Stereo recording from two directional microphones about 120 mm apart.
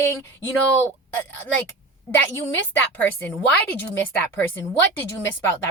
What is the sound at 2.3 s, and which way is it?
A woman's voice, 25° left (ahead or behind).